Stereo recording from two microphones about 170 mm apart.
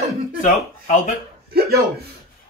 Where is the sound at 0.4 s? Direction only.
45° left (ahead or behind).